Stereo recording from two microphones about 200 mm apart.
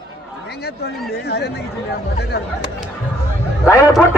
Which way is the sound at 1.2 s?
55° left (ahead or behind).